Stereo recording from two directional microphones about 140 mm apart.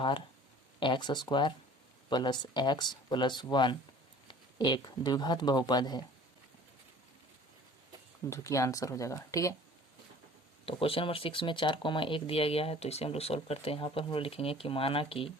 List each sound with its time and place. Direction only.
0.8 s speech: 35° left (ahead or behind)
8.3 s speech: 20° left (ahead or behind)
10.7 s speech: 40° left (ahead or behind)